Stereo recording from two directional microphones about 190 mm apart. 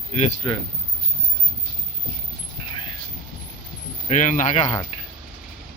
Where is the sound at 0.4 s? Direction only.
25° left (ahead or behind).